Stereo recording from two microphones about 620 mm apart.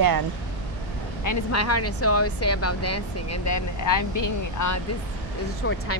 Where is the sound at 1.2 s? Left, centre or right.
Left.